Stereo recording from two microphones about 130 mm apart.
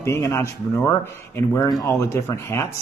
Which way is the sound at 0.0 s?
20° left (ahead or behind).